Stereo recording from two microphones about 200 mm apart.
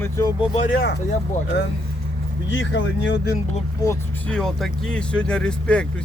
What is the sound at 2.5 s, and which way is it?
Speech, 65° left (ahead or behind).